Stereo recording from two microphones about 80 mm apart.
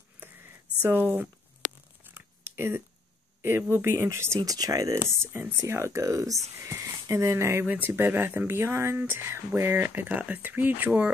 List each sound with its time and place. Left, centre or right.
0.2 s a sound: right
2.0 s zipper: right
3.4 s speech: right
4.5 s speech: right
5.0 s speech: right
7.6 s speech: centre